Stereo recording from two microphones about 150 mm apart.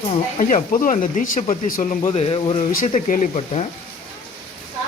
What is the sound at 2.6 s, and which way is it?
Speech, 55° left (ahead or behind).